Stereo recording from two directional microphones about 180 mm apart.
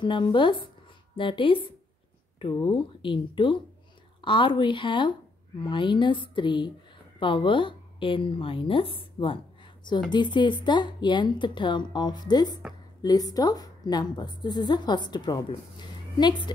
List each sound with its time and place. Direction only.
0.0 s a woman's voice: 25° left (ahead or behind)